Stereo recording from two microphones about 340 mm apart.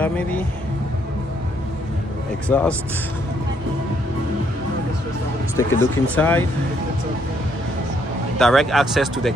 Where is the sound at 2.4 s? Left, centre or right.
Centre.